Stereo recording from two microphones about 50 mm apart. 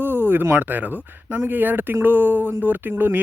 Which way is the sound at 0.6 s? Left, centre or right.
Right.